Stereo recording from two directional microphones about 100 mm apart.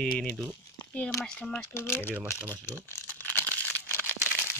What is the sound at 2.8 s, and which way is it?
Crumpling, 20° left (ahead or behind).